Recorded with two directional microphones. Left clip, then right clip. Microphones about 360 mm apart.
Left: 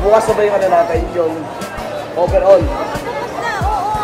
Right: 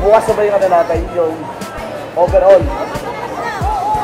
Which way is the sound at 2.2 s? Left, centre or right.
Centre.